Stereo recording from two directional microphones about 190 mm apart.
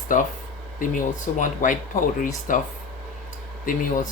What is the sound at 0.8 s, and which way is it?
Speech, 45° left (ahead or behind).